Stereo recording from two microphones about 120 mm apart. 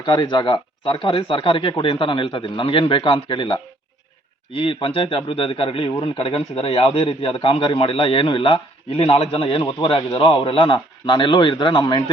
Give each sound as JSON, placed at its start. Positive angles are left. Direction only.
{"t": 0.0, "sound": "speech", "side_deg": 40}
{"t": 4.7, "sound": "a man's voice", "side_deg": 45}